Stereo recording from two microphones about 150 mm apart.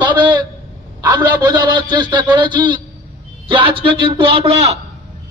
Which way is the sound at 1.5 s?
30° right (ahead or behind).